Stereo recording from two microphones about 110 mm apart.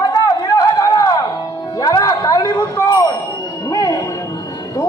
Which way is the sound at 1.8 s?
35° left (ahead or behind).